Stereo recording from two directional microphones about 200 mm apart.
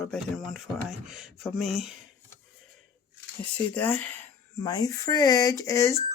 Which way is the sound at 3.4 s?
10° left (ahead or behind).